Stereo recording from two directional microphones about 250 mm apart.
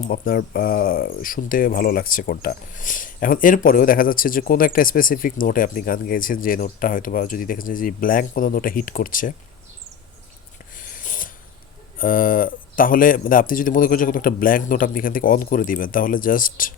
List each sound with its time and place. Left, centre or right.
0.1 s speech: left
10.8 s a sound: left
11.9 s speech: left